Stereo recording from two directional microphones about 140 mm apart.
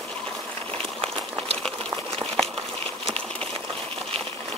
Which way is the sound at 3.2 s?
5° left (ahead or behind).